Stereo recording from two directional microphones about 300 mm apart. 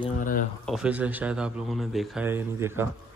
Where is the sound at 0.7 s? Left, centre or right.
Centre.